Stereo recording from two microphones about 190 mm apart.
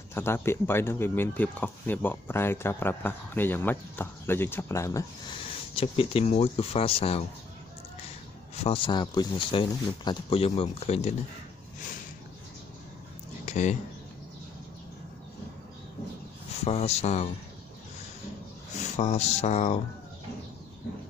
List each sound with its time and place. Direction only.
0.1 s speech: 10° left (ahead or behind)
5.4 s speech: 30° left (ahead or behind)
8.6 s speech: 25° left (ahead or behind)
13.5 s speech: 40° left (ahead or behind)
16.5 s speech: 35° left (ahead or behind)
18.8 s speech: 35° left (ahead or behind)